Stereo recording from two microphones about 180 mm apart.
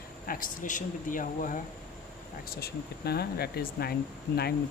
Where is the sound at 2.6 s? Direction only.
60° left (ahead or behind).